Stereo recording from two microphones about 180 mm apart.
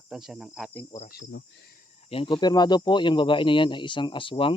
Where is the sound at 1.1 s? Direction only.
85° left.